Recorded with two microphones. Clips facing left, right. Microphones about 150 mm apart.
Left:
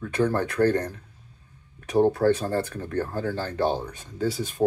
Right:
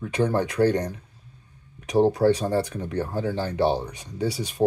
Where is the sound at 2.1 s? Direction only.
15° right (ahead or behind).